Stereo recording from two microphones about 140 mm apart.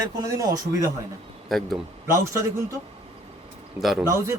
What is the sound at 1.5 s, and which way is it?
Speech, centre (ahead or behind).